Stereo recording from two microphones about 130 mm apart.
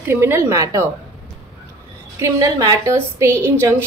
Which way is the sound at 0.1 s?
20° right (ahead or behind).